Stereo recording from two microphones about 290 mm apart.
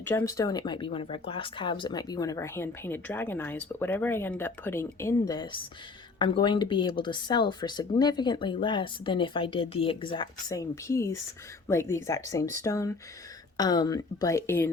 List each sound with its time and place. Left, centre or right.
0.0 s speech: centre